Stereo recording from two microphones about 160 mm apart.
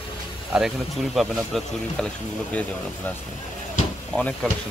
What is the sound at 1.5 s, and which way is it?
Speech, centre (ahead or behind).